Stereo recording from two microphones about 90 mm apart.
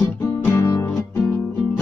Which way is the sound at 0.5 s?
45° left (ahead or behind).